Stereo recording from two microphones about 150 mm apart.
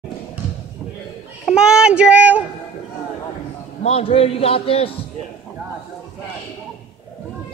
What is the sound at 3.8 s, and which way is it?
A man's voice, 40° left (ahead or behind).